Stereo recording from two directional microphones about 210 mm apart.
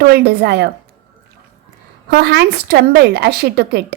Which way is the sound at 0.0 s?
50° right (ahead or behind).